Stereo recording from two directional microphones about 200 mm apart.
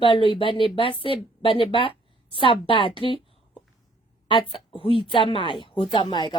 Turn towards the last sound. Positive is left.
turn(degrees=20)  # may be behind; listen again after turning